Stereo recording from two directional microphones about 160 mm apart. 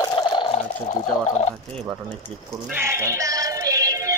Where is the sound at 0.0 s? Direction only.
30° left (ahead or behind).